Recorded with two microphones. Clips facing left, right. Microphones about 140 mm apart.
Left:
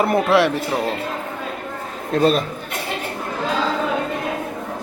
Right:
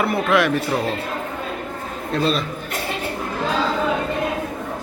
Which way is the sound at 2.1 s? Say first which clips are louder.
Left 4 dB; 50° left (ahead or behind).